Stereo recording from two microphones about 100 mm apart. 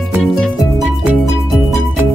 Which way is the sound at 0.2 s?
5° left (ahead or behind).